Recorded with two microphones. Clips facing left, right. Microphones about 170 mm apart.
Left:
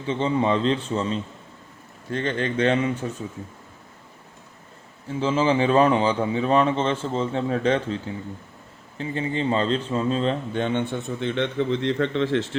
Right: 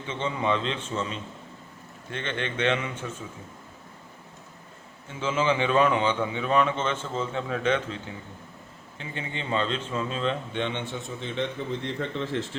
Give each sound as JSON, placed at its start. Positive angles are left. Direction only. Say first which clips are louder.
{"t": 0.1, "sound": "a man's voice", "louder": "left 6 dB", "side_deg": 35}
{"t": 5.0, "sound": "a man's voice", "louder": "left 4 dB", "side_deg": 35}